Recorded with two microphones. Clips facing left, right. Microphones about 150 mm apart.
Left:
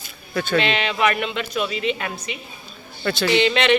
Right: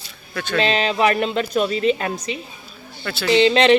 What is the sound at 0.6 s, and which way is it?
Speech, 35° right (ahead or behind).